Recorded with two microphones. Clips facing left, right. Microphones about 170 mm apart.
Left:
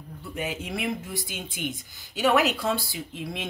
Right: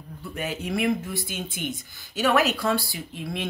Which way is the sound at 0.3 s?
15° left (ahead or behind).